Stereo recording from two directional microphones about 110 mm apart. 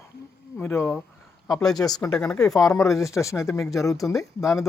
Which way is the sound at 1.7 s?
35° left (ahead or behind).